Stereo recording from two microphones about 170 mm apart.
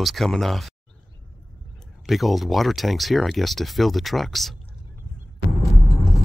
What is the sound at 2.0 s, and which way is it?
Speech, centre (ahead or behind).